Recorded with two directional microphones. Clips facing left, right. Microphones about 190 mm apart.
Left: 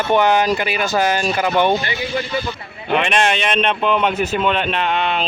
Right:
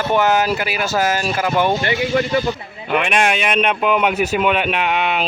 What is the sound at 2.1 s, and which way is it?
Speech, 45° right (ahead or behind).